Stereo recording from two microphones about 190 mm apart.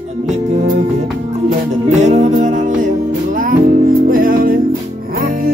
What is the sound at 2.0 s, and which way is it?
Music, 35° right (ahead or behind).